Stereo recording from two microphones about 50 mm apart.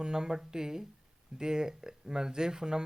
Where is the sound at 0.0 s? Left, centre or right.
Centre.